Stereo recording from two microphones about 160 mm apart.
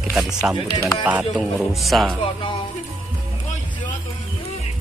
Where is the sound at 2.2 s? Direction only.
30° left (ahead or behind).